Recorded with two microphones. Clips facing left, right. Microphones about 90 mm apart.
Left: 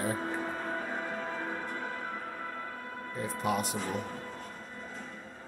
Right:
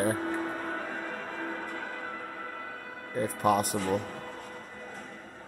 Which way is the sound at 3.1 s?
45° right (ahead or behind).